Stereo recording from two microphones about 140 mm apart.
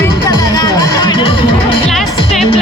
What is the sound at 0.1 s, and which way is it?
Music, 30° left (ahead or behind).